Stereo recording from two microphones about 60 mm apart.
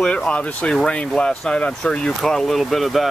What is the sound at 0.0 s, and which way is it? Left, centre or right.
Speech, centre.